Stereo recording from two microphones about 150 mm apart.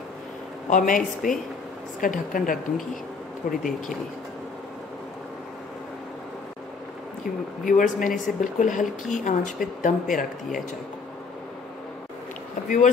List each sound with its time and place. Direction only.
0.7 s a woman's voice: 60° left (ahead or behind)
7.6 s speech: 60° left (ahead or behind)
12.6 s speech: 60° left (ahead or behind)